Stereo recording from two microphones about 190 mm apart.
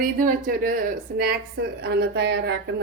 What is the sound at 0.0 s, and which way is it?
A woman's voice, 50° right (ahead or behind).